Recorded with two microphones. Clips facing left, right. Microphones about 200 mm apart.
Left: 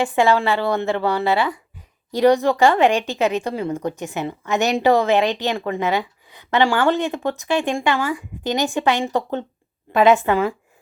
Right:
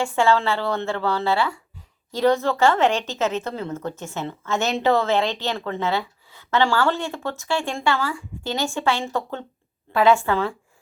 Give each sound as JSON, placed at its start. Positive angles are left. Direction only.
{"t": 0.0, "sound": "a woman's voice", "side_deg": 15}